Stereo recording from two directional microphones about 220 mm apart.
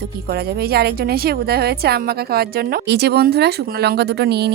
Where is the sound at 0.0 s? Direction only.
45° right (ahead or behind).